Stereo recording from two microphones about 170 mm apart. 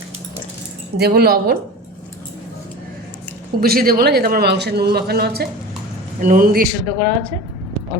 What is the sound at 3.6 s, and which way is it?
Speech, 60° right (ahead or behind).